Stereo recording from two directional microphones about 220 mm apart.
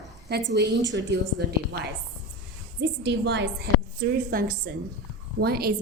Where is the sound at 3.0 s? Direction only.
50° right (ahead or behind).